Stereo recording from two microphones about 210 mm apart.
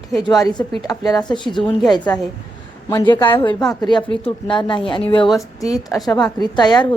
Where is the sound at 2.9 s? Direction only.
15° left (ahead or behind).